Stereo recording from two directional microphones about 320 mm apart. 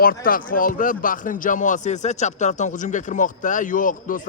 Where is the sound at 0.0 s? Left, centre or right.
Left.